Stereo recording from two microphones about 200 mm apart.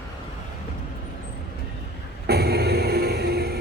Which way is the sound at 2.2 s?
55° right (ahead or behind).